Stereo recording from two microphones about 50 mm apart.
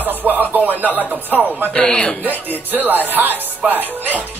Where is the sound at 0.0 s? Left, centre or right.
Right.